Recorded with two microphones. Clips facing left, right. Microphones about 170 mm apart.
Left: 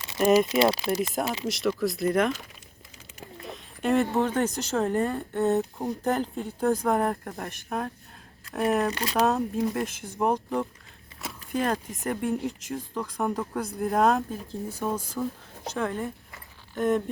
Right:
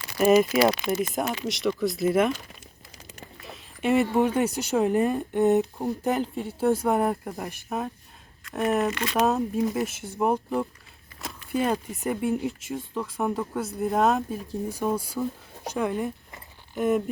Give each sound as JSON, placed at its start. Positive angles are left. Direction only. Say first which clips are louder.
{"t": 0.2, "sound": "speech", "louder": "right 2 dB", "side_deg": 0}
{"t": 0.6, "sound": "speech", "louder": "right 1 dB", "side_deg": 30}
{"t": 1.0, "sound": "speech", "louder": "right 1 dB", "side_deg": 0}
{"t": 3.4, "sound": "a sound", "louder": "right 1 dB", "side_deg": 0}
{"t": 4.2, "sound": "speech", "louder": "right 2 dB", "side_deg": -10}
{"t": 5.7, "sound": "speech", "louder": "right 1 dB", "side_deg": -5}
{"t": 8.9, "sound": "speech", "louder": "right 1 dB", "side_deg": 35}
{"t": 9.2, "sound": "speech", "louder": "right 1 dB", "side_deg": 0}
{"t": 14.7, "sound": "speech", "louder": "right 3 dB", "side_deg": -10}